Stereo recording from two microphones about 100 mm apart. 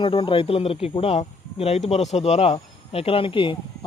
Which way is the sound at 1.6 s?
90° left.